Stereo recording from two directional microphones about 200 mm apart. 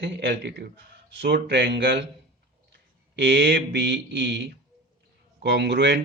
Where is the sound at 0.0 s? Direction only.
60° right (ahead or behind).